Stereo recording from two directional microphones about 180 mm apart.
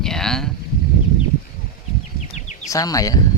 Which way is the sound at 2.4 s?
40° left (ahead or behind).